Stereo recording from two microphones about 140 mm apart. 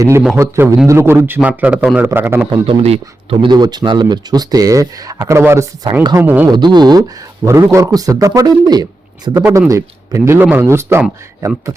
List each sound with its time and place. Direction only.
0.3 s a man's voice: 20° right (ahead or behind)
2.6 s speech: 45° right (ahead or behind); by 5.6 s 20° right (ahead or behind)
5.8 s speech: 30° right (ahead or behind)
6.1 s a man's voice: 15° right (ahead or behind)
6.5 s a sound: 30° right (ahead or behind)
7.4 s speech: 20° right (ahead or behind)